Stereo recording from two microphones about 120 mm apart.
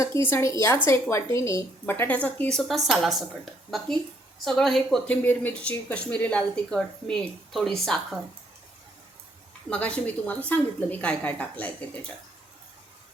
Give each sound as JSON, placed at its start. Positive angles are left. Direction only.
{"t": 0.0, "sound": "a woman's voice", "side_deg": 20}
{"t": 5.0, "sound": "speech", "side_deg": 15}
{"t": 9.6, "sound": "speech", "side_deg": 10}